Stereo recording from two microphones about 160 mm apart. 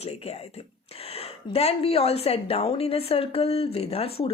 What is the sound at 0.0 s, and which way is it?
Speech, 40° left (ahead or behind).